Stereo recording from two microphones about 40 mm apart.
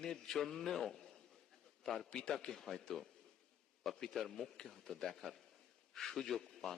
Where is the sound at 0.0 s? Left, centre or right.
Centre.